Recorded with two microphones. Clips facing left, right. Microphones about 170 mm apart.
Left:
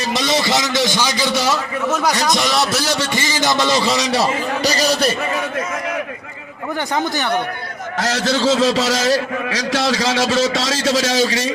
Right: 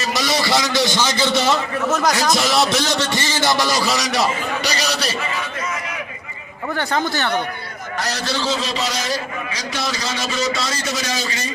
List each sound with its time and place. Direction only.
0.1 s a man's voice: 25° left (ahead or behind)
2.0 s a man's voice: centre (ahead or behind); by 4.3 s 30° left (ahead or behind)
4.6 s a man's voice: 45° left (ahead or behind)
6.7 s a man's voice: 15° left (ahead or behind)
7.9 s a man's voice: 90° left